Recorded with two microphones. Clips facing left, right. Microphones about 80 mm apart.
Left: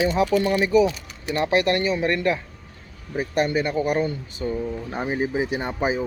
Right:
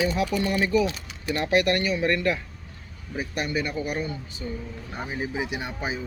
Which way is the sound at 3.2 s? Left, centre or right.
Left.